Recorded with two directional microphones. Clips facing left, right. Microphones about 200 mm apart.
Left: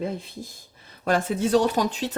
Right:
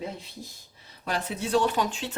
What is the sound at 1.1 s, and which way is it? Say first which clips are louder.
Speech: left 7 dB; 50° left (ahead or behind).